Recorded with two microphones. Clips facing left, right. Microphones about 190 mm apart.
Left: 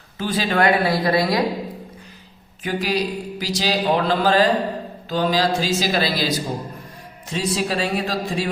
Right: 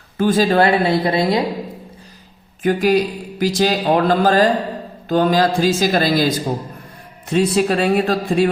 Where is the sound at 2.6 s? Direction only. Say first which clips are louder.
Right 7 dB; 50° right (ahead or behind).